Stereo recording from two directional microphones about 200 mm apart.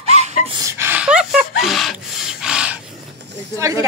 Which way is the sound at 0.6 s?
10° right (ahead or behind).